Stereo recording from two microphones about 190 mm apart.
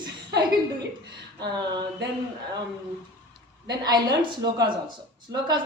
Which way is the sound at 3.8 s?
20° right (ahead or behind).